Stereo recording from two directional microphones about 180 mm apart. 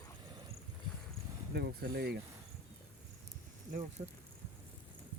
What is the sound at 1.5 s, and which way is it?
Speech, 65° right (ahead or behind).